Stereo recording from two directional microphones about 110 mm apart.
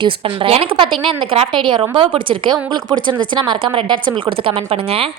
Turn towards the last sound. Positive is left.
turn(degrees=-60)  # may be behind; listen again after turning